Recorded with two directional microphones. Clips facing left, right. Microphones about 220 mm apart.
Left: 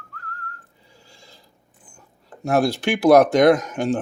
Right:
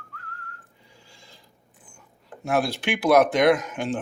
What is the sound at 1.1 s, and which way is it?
Mechanisms, 35° left (ahead or behind).